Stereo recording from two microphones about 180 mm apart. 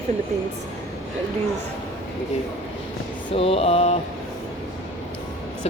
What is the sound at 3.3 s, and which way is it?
Speech, 30° left (ahead or behind).